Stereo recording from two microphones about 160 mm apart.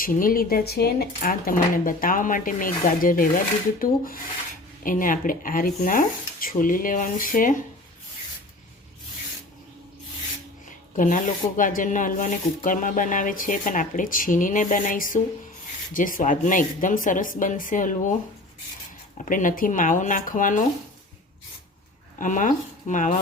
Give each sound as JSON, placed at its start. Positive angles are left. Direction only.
{"t": 0.0, "sound": "speech", "side_deg": 60}
{"t": 10.9, "sound": "speech", "side_deg": 55}
{"t": 19.1, "sound": "speech", "side_deg": 50}
{"t": 22.2, "sound": "speech", "side_deg": 55}